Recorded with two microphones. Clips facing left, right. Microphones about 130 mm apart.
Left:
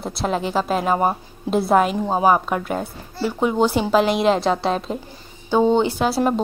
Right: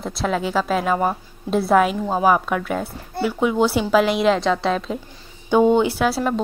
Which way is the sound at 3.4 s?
5° right (ahead or behind).